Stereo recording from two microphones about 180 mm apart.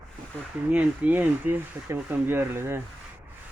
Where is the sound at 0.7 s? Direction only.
10° right (ahead or behind).